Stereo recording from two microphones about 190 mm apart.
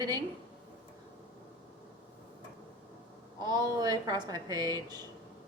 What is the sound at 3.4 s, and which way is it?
Speech, 20° right (ahead or behind).